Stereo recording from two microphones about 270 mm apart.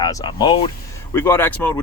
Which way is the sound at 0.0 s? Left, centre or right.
Centre.